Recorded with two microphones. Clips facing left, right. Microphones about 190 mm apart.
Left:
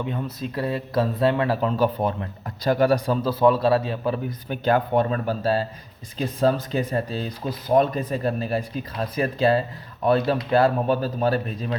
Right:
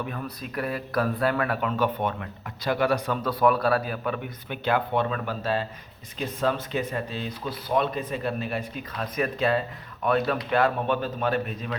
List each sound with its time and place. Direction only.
0.0 s speech: 25° left (ahead or behind)